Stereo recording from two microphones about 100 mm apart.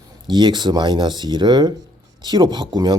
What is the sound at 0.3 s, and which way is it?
Speech, 50° right (ahead or behind).